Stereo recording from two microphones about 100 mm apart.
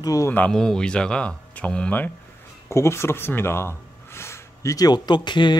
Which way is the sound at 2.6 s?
30° left (ahead or behind).